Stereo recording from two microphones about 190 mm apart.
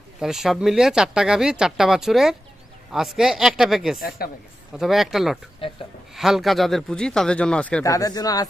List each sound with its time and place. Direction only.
0.2 s speech: centre (ahead or behind)
4.2 s a woman's voice: 50° left (ahead or behind)
4.7 s speech: centre (ahead or behind)
5.6 s speech: 30° left (ahead or behind)
6.1 s speech: centre (ahead or behind)
7.9 s speech: 20° left (ahead or behind)